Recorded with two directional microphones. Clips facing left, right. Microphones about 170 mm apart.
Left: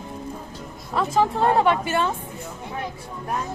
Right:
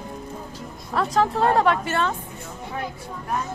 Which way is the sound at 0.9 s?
Centre (ahead or behind).